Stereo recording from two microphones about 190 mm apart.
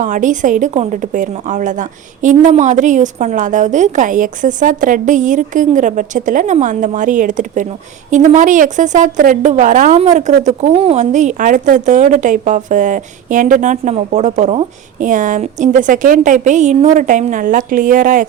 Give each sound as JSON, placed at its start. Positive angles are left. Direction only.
{"t": 0.0, "sound": "speech", "side_deg": -40}